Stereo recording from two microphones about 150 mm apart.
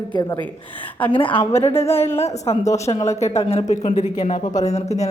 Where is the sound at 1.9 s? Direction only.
15° left (ahead or behind).